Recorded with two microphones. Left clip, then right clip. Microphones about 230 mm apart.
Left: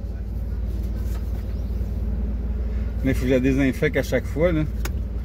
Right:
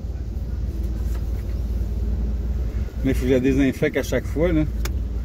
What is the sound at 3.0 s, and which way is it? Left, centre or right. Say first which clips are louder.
Speech: right 1 dB; centre.